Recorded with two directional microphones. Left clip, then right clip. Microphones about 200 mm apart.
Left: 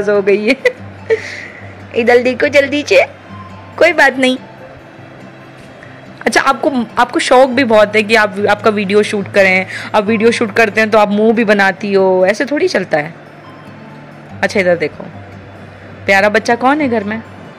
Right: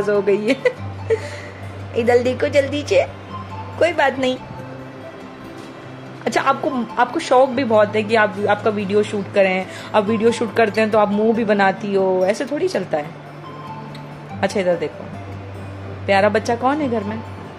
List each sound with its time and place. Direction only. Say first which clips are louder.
0.0 s a woman's voice: left 6 dB; 20° left (ahead or behind)
6.2 s a woman's voice: left 7 dB; 25° left (ahead or behind)
14.4 s a woman's voice: left 7 dB; 25° left (ahead or behind)
16.1 s a woman's voice: left 6 dB; 25° left (ahead or behind)